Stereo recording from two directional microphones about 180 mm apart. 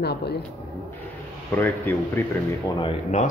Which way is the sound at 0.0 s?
65° left (ahead or behind).